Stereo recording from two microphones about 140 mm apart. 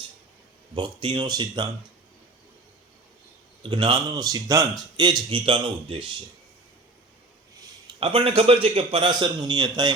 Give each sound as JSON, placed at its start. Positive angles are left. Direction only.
{"t": 0.8, "sound": "speech", "side_deg": -35}
{"t": 3.6, "sound": "speech", "side_deg": -35}
{"t": 7.9, "sound": "speech", "side_deg": -40}